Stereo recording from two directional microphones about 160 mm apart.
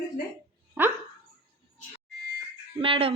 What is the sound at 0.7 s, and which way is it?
Dog, 15° right (ahead or behind).